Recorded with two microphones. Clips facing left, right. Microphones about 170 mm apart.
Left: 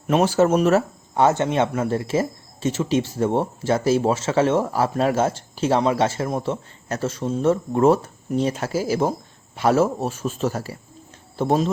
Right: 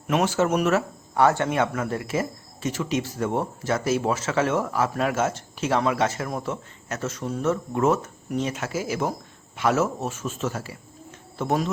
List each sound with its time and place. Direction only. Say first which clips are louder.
0.1 s a man's voice: left 5 dB; 35° left (ahead or behind)